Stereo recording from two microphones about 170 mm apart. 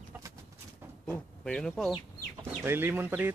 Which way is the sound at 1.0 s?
10° left (ahead or behind).